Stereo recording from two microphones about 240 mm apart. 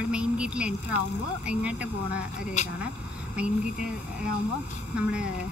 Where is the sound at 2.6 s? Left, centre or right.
Left.